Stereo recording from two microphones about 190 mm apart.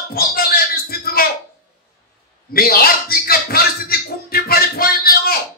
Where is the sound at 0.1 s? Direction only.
55° left (ahead or behind).